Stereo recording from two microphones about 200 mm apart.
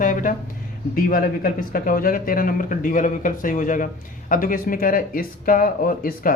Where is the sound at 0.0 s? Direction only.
40° left (ahead or behind).